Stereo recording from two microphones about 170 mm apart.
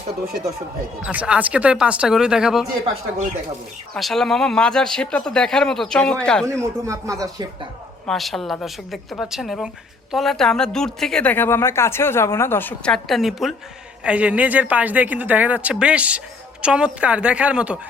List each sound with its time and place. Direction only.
1.0 s a woman's voice: 5° right (ahead or behind)
3.9 s a woman's voice: centre (ahead or behind)
6.5 s speech: 15° right (ahead or behind)
8.0 s a woman's voice: centre (ahead or behind)